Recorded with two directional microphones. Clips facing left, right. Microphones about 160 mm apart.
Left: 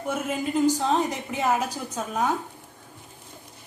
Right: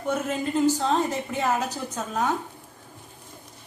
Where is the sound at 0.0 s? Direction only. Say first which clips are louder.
Right 1 dB; 10° left (ahead or behind).